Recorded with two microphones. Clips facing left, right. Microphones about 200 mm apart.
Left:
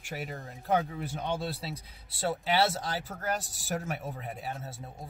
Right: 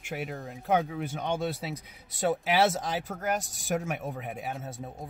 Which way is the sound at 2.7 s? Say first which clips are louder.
Right 3 dB; centre (ahead or behind).